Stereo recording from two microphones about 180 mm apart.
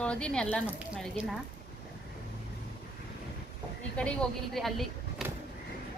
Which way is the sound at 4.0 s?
5° left (ahead or behind).